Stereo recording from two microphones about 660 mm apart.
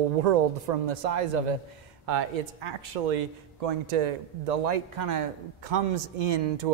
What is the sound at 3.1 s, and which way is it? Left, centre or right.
A man's voice, right.